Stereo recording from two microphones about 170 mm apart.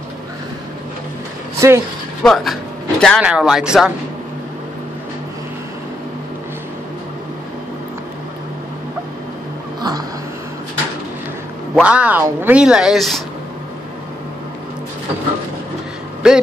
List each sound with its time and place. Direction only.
1.6 s speech: 20° right (ahead or behind)
2.2 s speech: centre (ahead or behind)
9.8 s music: 25° right (ahead or behind)
11.7 s speech: 5° right (ahead or behind)
16.2 s speech: 5° right (ahead or behind)